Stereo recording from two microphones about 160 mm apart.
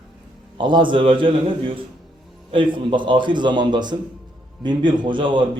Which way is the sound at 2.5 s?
30° right (ahead or behind).